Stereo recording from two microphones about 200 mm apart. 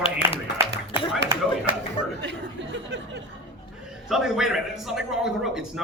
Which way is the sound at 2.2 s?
60° right (ahead or behind).